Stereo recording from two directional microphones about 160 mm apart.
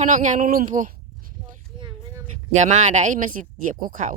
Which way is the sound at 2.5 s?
50° right (ahead or behind).